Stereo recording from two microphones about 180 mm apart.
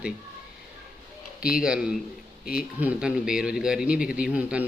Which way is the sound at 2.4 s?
55° left (ahead or behind).